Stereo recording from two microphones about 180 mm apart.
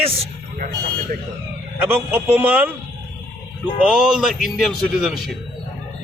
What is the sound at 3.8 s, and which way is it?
A man's voice, 5° right (ahead or behind).